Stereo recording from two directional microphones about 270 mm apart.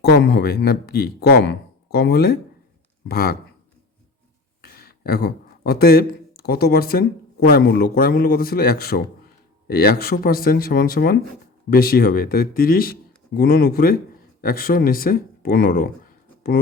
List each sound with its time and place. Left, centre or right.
0.0 s speech: left
4.6 s speech: left